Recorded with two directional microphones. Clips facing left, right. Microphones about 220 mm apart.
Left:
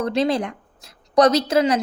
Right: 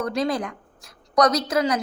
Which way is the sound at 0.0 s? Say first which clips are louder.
Left 4 dB; 25° left (ahead or behind).